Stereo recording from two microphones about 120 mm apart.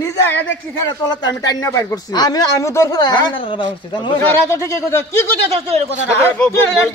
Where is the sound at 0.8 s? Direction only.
35° left (ahead or behind).